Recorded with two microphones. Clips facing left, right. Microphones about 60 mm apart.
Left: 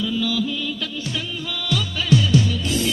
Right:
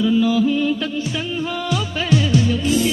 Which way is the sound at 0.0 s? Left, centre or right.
Right.